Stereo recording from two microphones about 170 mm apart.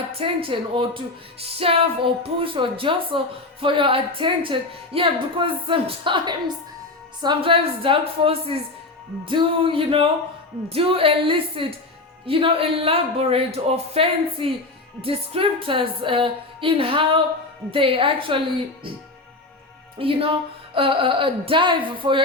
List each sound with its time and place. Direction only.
0.2 s a woman's voice: 30° right (ahead or behind)
20.0 s speech: 35° right (ahead or behind)